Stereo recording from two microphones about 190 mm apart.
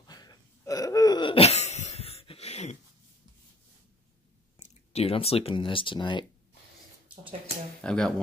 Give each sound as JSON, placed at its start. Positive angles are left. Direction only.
{"t": 0.0, "sound": "a sound", "side_deg": 20}
{"t": 4.6, "sound": "speech", "side_deg": 35}
{"t": 7.8, "sound": "speech", "side_deg": 5}